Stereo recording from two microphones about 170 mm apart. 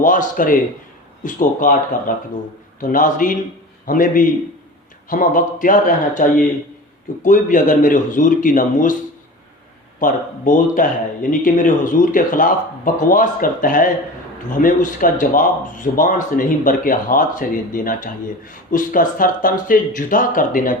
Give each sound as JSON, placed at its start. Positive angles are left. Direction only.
{"t": 0.0, "sound": "a man's voice", "side_deg": 50}
{"t": 10.0, "sound": "a man's voice", "side_deg": 50}